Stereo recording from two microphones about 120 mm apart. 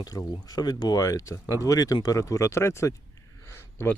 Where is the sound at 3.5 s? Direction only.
20° left (ahead or behind).